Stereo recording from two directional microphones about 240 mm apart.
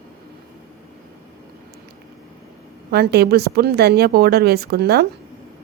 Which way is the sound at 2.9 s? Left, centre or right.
Right.